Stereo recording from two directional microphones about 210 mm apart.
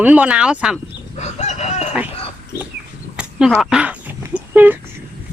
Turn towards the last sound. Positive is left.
turn(degrees=-10)  # may be behind; listen again after turning